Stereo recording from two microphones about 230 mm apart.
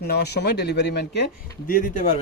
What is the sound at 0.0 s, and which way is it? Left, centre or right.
Speech, left.